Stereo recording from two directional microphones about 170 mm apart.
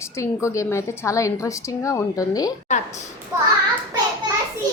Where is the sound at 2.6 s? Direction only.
45° left (ahead or behind).